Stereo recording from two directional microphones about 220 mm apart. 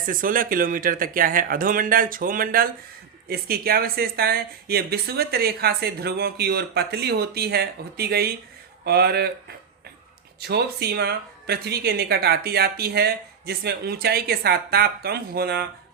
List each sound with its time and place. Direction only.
0.0 s a woman's voice: 40° right (ahead or behind)
10.4 s a woman's voice: 45° right (ahead or behind)